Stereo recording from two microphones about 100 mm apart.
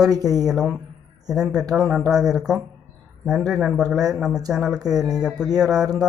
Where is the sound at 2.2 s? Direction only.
5° right (ahead or behind).